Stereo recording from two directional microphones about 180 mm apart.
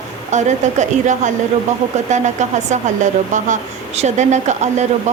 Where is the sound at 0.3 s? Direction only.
40° right (ahead or behind).